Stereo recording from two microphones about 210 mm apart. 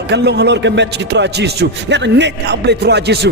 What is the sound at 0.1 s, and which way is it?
Speech, 55° right (ahead or behind).